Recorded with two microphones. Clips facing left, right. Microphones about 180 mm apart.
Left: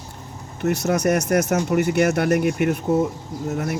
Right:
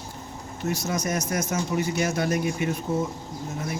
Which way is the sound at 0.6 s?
65° left (ahead or behind).